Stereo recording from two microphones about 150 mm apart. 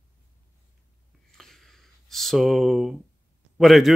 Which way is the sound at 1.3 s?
Centre (ahead or behind).